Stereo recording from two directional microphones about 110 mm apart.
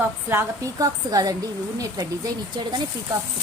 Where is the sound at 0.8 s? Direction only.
35° right (ahead or behind).